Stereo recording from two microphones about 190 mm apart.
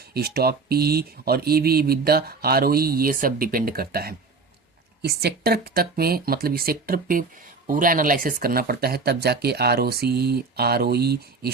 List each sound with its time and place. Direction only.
0.1 s speech: 55° right (ahead or behind)